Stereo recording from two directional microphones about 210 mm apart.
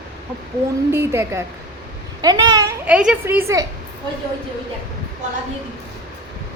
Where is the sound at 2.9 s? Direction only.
5° right (ahead or behind).